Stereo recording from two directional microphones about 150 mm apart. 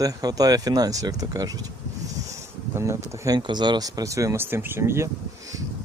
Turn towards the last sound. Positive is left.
turn(degrees=-15)  # may be behind; listen again after turning